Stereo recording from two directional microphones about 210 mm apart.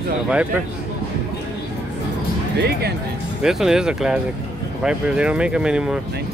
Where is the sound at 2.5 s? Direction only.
50° right (ahead or behind).